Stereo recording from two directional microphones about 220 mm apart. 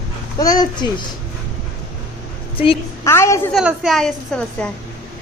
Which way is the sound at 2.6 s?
25° left (ahead or behind).